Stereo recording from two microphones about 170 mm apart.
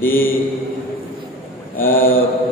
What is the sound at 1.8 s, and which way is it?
Speech, 55° left (ahead or behind).